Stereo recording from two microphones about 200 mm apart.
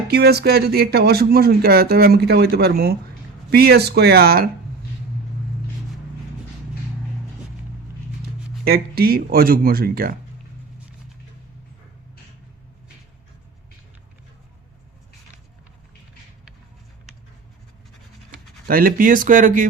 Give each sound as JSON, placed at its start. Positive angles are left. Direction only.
{"t": 0.1, "sound": "speech", "side_deg": -50}
{"t": 8.6, "sound": "speech", "side_deg": -50}
{"t": 18.7, "sound": "speech", "side_deg": -45}